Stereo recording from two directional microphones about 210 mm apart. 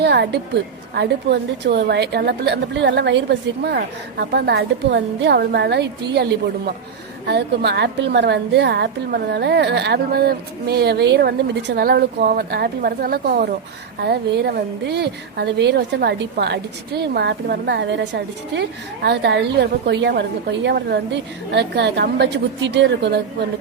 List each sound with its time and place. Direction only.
0.0 s a woman's voice: 50° right (ahead or behind)
7.3 s a woman's voice: 50° right (ahead or behind)